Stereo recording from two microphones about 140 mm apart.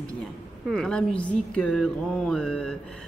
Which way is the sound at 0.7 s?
5° left (ahead or behind).